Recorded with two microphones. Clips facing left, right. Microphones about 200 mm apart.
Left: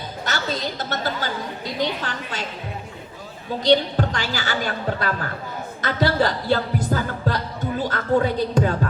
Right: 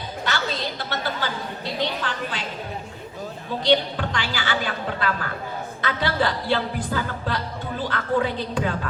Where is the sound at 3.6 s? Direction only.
40° left (ahead or behind).